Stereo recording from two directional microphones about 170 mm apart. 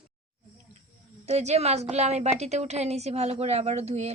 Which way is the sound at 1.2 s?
40° right (ahead or behind).